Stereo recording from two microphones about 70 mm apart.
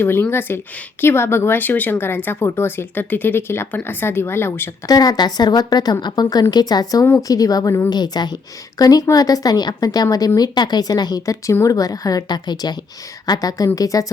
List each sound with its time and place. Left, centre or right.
0.0 s speech: left
4.9 s a woman's voice: left
7.2 s a woman's voice: left
7.9 s a woman's voice: left
8.8 s a woman's voice: left
13.2 s a woman's voice: left